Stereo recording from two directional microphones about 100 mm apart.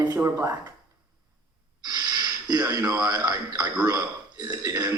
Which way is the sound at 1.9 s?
40° right (ahead or behind).